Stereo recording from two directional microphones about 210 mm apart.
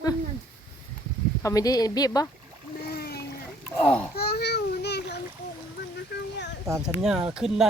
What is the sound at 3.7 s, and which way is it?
Speech, 5° left (ahead or behind).